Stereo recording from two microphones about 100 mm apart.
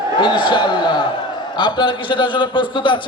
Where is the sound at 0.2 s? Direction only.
55° left (ahead or behind).